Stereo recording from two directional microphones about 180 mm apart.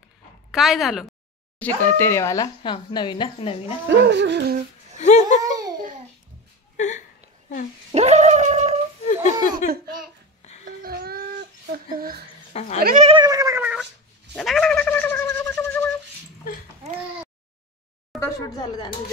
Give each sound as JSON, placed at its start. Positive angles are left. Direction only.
{"t": 0.5, "sound": "a woman's voice", "side_deg": 0}
{"t": 1.6, "sound": "speech", "side_deg": 10}
{"t": 4.0, "sound": "a sound", "side_deg": -75}
{"t": 4.9, "sound": "a sound", "side_deg": 40}
{"t": 5.4, "sound": "babbling", "side_deg": -20}
{"t": 7.9, "sound": "gargling", "side_deg": -40}
{"t": 9.0, "sound": "laughter", "side_deg": 40}
{"t": 10.8, "sound": "a sound", "side_deg": -60}
{"t": 12.5, "sound": "cat", "side_deg": 40}
{"t": 12.8, "sound": "speech", "side_deg": -45}
{"t": 13.1, "sound": "cat", "side_deg": -20}
{"t": 14.3, "sound": "a sound", "side_deg": 0}
{"t": 18.2, "sound": "speech", "side_deg": 20}